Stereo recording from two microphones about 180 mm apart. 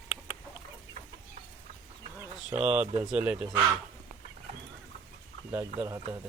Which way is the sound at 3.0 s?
5° right (ahead or behind).